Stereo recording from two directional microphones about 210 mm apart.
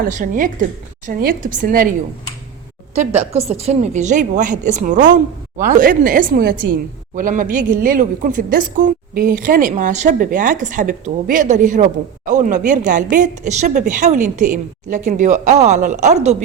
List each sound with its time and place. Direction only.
0.0 s a woman's voice: 40° right (ahead or behind)